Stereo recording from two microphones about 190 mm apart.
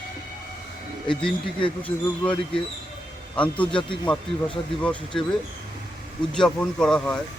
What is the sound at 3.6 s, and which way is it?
Speech, 25° left (ahead or behind).